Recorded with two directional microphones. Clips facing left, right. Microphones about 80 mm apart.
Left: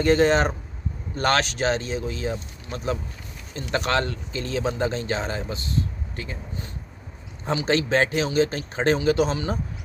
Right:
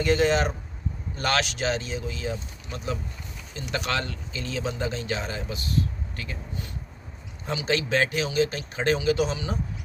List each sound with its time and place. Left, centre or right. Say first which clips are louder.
0.0 s speech: left 3 dB; left
7.5 s speech: left 3 dB; left